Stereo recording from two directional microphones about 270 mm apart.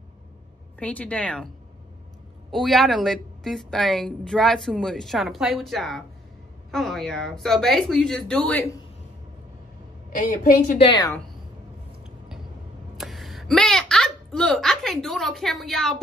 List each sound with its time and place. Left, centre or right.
0.7 s a woman's voice: centre
2.5 s a woman's voice: centre
10.1 s a woman's voice: left
11.0 s a woman's voice: centre
12.9 s a sound: centre